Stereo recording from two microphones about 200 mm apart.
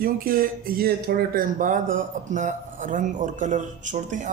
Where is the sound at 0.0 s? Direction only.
45° right (ahead or behind).